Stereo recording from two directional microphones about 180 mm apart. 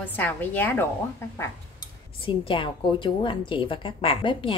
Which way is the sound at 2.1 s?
30° left (ahead or behind).